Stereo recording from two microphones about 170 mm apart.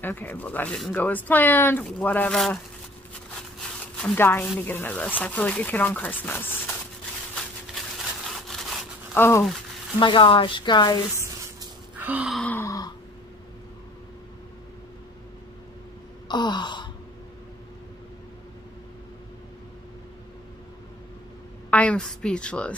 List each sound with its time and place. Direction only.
0.0 s speech: 10° left (ahead or behind)
3.8 s speech: 10° left (ahead or behind)
8.4 s sawing: centre (ahead or behind)
9.1 s speech: 10° left (ahead or behind)
9.9 s speech: 30° left (ahead or behind)
12.0 s a sound: 10° right (ahead or behind)
12.4 s a sound: 10° left (ahead or behind)
16.3 s a sound: 25° left (ahead or behind)
21.6 s a woman's voice: 10° left (ahead or behind)